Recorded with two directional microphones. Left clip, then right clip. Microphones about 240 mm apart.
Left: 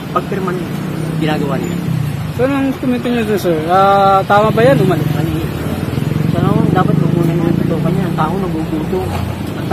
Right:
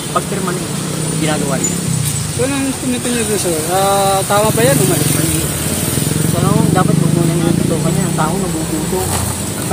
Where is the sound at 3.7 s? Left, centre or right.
Left.